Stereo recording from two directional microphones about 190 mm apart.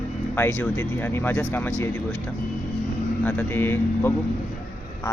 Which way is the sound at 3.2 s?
10° left (ahead or behind).